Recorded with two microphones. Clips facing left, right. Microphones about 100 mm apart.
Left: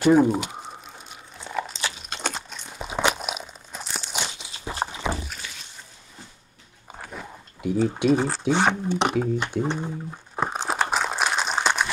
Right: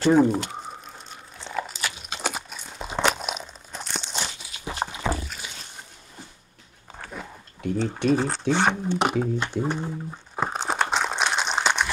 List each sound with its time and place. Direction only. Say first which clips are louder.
0.1 s speech: left 1 dB; 5° left (ahead or behind)
1.4 s biting: left 1 dB; 5° left (ahead or behind)
2.0 s crunch: right 1 dB; 5° right (ahead or behind)
4.4 s walk: left 1 dB; 25° left (ahead or behind)
5.1 s rowboat: right 2 dB; 10° left (ahead or behind)
7.0 s a sound: even; 5° left (ahead or behind)
8.5 s speech: left 1 dB; 10° left (ahead or behind)
8.9 s speech: left 1 dB; centre (ahead or behind)
9.6 s crumpling: left 1 dB; centre (ahead or behind)